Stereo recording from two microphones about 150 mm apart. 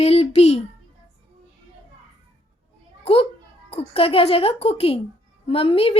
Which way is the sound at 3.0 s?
40° left (ahead or behind).